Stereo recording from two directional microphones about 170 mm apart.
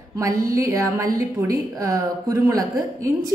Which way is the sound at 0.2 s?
20° right (ahead or behind).